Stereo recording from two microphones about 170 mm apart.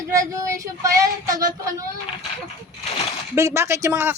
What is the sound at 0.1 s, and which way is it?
Speech, 20° right (ahead or behind).